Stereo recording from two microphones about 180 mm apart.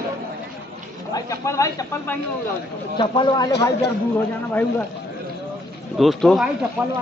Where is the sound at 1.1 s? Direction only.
15° left (ahead or behind).